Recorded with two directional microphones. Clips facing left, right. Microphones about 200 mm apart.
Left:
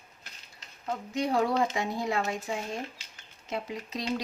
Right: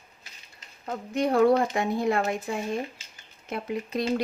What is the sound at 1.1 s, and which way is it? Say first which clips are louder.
Speech: right 6 dB; 55° right (ahead or behind).